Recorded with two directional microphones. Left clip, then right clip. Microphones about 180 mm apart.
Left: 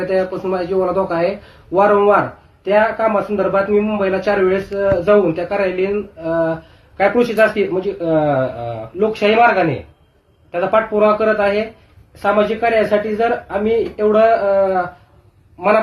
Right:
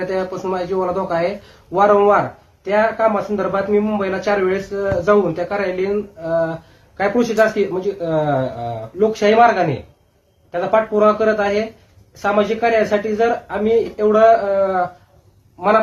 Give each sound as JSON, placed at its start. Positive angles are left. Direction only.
{"t": 0.0, "sound": "speech", "side_deg": -15}